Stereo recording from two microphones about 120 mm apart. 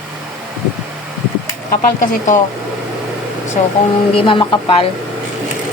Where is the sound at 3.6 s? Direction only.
90° left.